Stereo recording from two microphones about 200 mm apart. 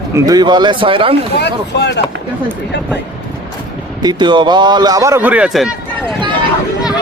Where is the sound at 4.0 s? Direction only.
20° right (ahead or behind); by 5.8 s centre (ahead or behind).